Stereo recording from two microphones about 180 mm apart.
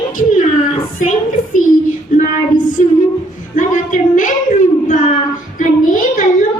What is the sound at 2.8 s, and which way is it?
Speech, 40° left (ahead or behind).